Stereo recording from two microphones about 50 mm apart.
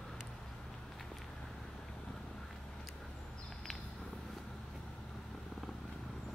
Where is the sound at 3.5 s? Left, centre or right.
Centre.